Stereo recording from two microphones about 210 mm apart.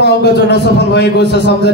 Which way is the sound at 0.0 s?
50° left (ahead or behind).